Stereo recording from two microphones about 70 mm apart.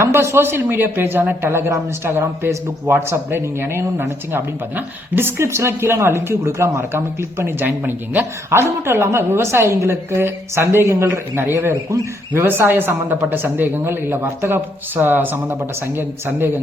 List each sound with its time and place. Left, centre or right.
0.0 s a man's voice: right
8.4 s a man's voice: right